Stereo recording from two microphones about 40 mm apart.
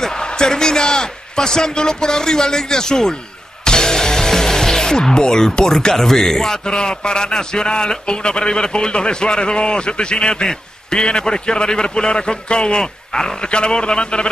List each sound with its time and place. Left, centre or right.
0.0 s a man's voice: centre
3.6 s music: centre
5.9 s speech: centre